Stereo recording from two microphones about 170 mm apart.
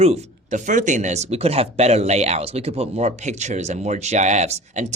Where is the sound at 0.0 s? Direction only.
40° right (ahead or behind).